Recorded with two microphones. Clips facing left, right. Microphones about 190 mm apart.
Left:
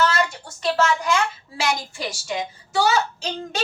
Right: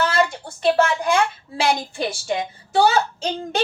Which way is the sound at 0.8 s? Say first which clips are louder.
Left 1 dB; 55° right (ahead or behind).